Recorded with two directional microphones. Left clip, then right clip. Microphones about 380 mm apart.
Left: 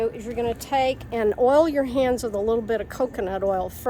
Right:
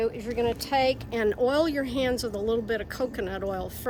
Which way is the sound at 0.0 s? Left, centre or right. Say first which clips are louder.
Left 1 dB; centre.